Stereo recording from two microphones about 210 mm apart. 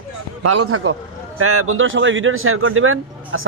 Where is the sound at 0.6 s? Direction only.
90° right.